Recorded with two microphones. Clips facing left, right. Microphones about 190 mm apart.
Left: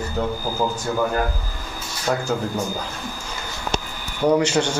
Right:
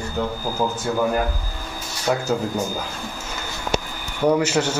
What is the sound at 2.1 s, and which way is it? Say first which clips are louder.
Speech: right 1 dB; 5° right (ahead or behind).